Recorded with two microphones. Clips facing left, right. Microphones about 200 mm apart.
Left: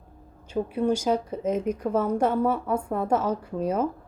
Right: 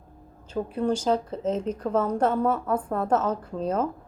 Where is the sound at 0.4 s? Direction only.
10° left (ahead or behind).